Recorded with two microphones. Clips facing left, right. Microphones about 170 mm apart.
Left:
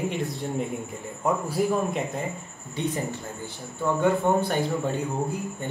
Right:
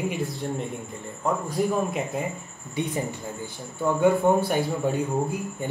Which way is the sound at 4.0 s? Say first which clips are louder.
Right 3 dB; 10° right (ahead or behind).